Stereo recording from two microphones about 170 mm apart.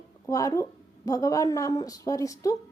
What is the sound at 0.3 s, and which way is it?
Speech, 20° left (ahead or behind).